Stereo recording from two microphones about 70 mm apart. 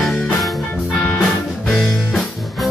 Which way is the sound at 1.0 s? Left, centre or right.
Centre.